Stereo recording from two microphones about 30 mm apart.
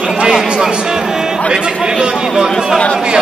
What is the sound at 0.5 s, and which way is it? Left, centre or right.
Speech, right.